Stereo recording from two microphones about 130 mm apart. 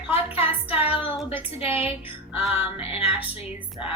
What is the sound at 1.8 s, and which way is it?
Music, 45° left (ahead or behind).